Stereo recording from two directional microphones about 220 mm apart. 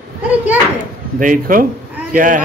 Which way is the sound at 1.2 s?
40° right (ahead or behind).